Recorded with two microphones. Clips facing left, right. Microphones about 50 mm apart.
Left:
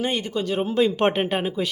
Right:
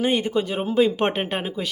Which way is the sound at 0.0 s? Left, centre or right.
Centre.